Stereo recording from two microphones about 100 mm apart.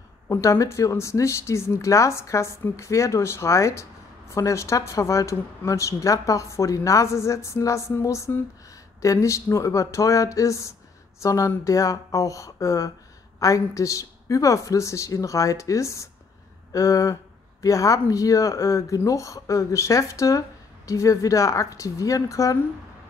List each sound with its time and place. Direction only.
0.3 s speech: 30° left (ahead or behind)